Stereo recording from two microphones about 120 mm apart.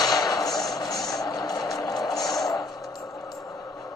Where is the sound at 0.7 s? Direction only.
30° left (ahead or behind).